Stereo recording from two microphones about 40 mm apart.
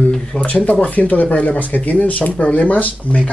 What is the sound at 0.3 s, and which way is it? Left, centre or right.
Speech, left.